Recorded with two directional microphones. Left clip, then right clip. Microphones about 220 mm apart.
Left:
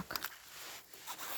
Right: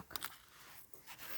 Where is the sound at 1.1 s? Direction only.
20° left (ahead or behind).